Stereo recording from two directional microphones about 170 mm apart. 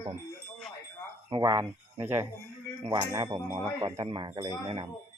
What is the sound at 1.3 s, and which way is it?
Speech, 15° right (ahead or behind).